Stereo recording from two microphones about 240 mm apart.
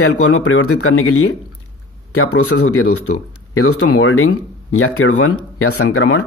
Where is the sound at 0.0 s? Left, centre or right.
Left.